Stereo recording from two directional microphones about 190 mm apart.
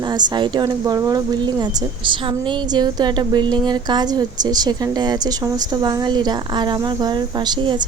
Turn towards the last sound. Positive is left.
turn(degrees=-25)  # may be behind; listen again after turning